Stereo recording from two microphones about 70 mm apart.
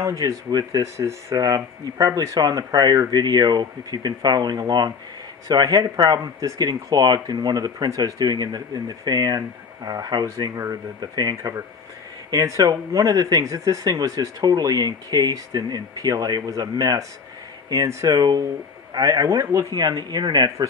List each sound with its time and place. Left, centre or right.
0.0 s speech: right
0.5 s speech: right
0.9 s speech: right
1.4 s speech: right
10.5 s speech: right
11.0 s speech: right
12.3 s speech: right
17.8 s speech: right
19.7 s speech: right